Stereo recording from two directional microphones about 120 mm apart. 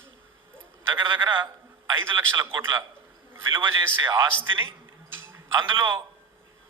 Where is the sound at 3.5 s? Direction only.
20° right (ahead or behind).